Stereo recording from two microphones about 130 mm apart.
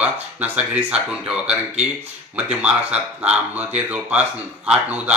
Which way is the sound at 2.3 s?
10° right (ahead or behind).